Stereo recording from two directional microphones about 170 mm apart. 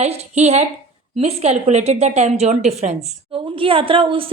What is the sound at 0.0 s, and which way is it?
Speech, 40° right (ahead or behind).